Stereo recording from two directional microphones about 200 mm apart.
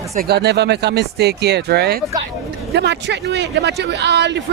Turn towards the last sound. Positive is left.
turn(degrees=-60)  # may be behind; listen again after turning